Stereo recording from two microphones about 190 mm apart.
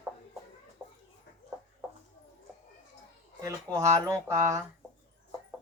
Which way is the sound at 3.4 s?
15° right (ahead or behind).